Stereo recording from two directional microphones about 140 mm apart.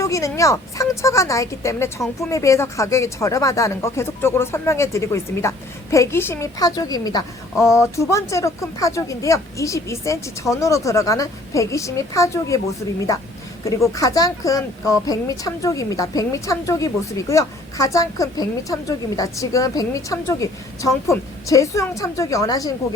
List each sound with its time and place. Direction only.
0.0 s a woman's voice: 20° left (ahead or behind)